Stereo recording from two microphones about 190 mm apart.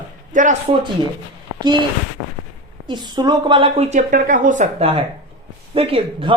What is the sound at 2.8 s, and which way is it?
A woman's voice, 25° right (ahead or behind).